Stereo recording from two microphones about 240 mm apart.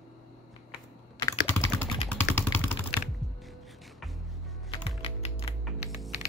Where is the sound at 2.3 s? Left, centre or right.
Centre.